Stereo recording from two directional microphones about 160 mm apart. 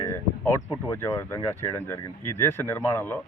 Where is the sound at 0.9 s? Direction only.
15° left (ahead or behind).